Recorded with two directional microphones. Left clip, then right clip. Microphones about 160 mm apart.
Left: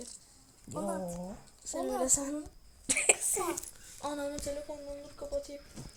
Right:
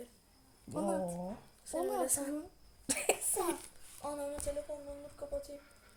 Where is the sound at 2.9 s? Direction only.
Centre (ahead or behind).